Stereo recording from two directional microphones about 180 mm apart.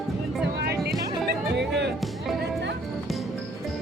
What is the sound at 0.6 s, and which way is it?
Music, 60° right (ahead or behind).